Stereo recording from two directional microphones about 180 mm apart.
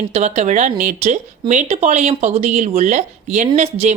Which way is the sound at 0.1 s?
40° right (ahead or behind).